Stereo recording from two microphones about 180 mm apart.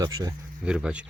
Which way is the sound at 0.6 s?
5° right (ahead or behind).